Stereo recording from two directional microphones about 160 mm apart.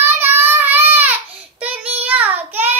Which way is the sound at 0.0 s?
15° right (ahead or behind).